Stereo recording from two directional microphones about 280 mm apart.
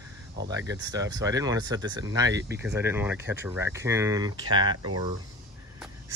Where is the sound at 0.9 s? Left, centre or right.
Centre.